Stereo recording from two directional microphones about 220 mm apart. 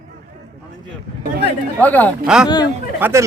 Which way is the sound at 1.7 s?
5° left (ahead or behind).